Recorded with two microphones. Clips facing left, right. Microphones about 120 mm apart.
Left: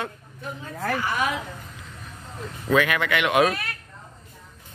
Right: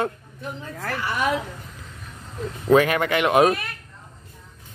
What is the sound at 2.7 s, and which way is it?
Speech, 35° right (ahead or behind).